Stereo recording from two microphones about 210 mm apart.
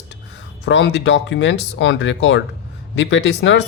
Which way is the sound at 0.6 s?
55° left (ahead or behind).